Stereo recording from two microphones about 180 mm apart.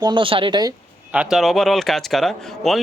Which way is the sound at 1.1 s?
5° right (ahead or behind).